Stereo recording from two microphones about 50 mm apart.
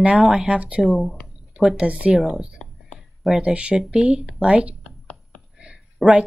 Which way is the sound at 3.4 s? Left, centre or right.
Right.